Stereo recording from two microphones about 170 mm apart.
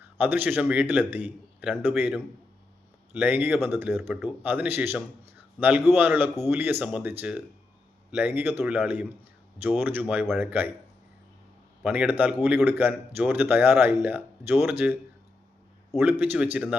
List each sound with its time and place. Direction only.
0.0 s speech: 10° right (ahead or behind)
11.8 s speech: 10° right (ahead or behind)
16.2 s speech: 10° right (ahead or behind)